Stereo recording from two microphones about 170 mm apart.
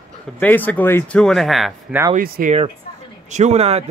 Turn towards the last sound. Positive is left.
turn(degrees=-40)  # may be behind; listen again after turning